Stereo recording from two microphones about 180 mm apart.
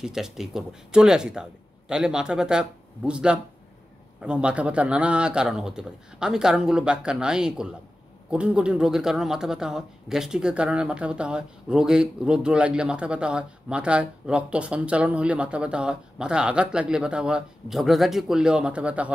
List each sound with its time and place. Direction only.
0.0 s speech: 5° right (ahead or behind)